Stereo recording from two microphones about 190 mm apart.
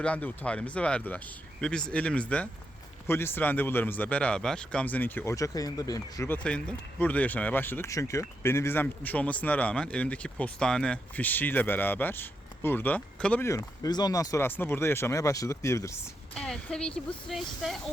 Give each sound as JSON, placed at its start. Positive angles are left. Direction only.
{"t": 0.0, "sound": "speech", "side_deg": 5}
{"t": 16.3, "sound": "speech", "side_deg": 5}